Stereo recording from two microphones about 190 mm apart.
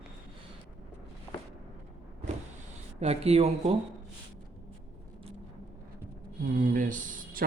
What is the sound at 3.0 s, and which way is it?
Speech, 35° right (ahead or behind).